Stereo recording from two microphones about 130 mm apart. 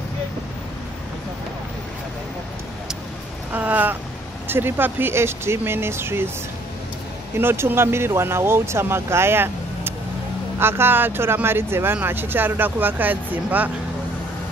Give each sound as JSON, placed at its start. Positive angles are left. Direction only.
{"t": 3.5, "sound": "speech", "side_deg": -15}
{"t": 7.3, "sound": "speech", "side_deg": -20}